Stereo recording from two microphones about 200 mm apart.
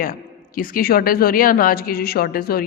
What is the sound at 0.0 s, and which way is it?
A woman's voice, 45° left (ahead or behind).